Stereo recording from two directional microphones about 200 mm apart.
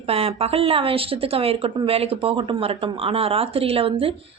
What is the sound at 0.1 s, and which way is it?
A woman's voice, 30° right (ahead or behind).